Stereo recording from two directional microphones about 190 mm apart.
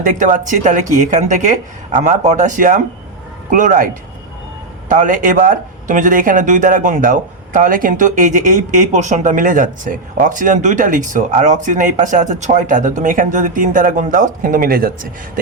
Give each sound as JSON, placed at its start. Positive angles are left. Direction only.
{"t": 0.0, "sound": "speech", "side_deg": -45}
{"t": 4.9, "sound": "speech", "side_deg": -45}